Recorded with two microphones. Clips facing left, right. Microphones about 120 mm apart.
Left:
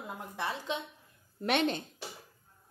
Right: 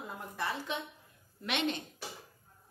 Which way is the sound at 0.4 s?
20° left (ahead or behind).